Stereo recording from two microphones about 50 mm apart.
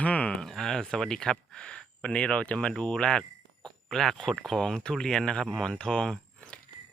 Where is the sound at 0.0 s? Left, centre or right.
Left.